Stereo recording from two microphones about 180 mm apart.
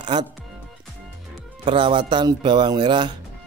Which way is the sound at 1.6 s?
30° right (ahead or behind).